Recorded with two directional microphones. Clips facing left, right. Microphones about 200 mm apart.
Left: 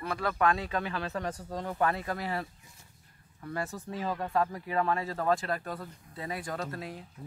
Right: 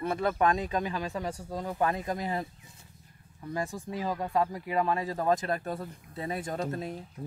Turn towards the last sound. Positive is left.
turn(degrees=-25)  # may be behind; listen again after turning